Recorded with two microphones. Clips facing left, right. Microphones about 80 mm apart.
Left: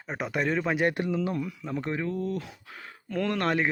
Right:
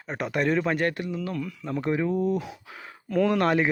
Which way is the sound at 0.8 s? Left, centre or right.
Left.